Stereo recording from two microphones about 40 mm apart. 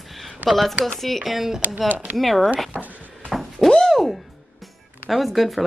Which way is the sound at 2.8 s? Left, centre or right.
Right.